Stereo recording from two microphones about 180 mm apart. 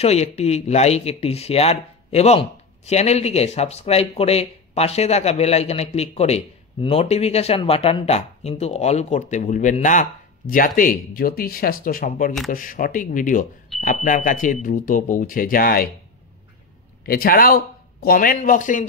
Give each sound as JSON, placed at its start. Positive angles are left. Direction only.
{"t": 0.0, "sound": "speech", "side_deg": 35}
{"t": 17.0, "sound": "speech", "side_deg": 55}